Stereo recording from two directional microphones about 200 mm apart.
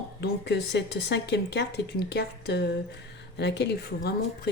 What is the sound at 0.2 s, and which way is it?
Speech, 55° left (ahead or behind).